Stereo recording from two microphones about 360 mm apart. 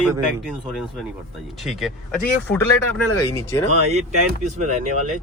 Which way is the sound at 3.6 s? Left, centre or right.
Centre.